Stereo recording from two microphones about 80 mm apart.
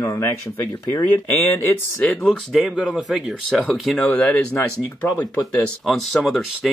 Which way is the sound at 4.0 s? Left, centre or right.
Left.